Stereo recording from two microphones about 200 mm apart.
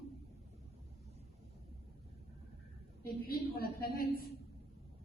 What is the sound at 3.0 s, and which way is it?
A man's voice, 50° left (ahead or behind).